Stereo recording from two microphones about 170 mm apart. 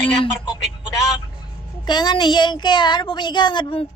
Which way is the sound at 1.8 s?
25° left (ahead or behind).